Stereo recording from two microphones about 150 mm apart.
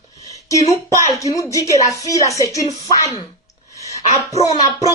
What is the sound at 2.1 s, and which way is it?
Speech, 20° left (ahead or behind).